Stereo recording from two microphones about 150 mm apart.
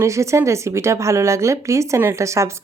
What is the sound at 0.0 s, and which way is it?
Speech, 20° right (ahead or behind).